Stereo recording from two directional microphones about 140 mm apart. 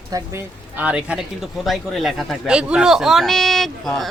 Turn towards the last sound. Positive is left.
turn(degrees=0)  # may be behind; listen again after turning